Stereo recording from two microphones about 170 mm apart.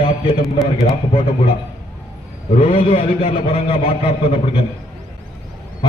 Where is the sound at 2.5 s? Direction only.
35° left (ahead or behind).